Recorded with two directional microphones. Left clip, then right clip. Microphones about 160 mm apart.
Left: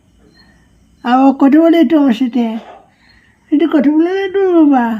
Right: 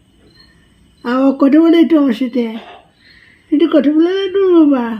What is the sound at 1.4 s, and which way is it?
A woman's voice, 35° left (ahead or behind).